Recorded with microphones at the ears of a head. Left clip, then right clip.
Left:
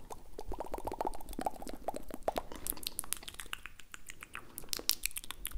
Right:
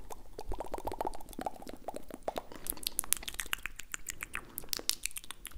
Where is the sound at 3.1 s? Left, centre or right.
Right.